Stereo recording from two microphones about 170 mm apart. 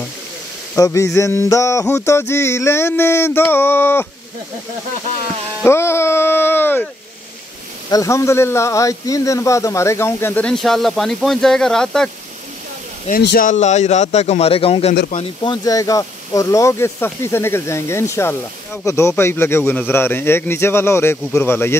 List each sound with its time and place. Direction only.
0.7 s a man's voice: 20° left (ahead or behind)
5.6 s music: 15° left (ahead or behind)
7.9 s a man's voice: 20° left (ahead or behind)
13.1 s speech: 65° left (ahead or behind)
13.5 s speech: 45° left (ahead or behind)
15.4 s a man's voice: 25° left (ahead or behind)